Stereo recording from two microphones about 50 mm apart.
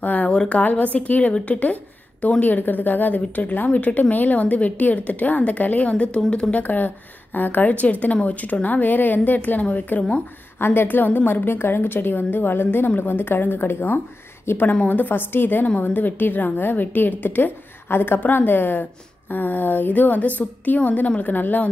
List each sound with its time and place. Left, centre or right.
0.0 s a sound: left
0.3 s a sound: centre
0.6 s a woman's voice: left
6.5 s a woman's voice: left
10.6 s a woman's voice: left
14.8 s a woman's voice: left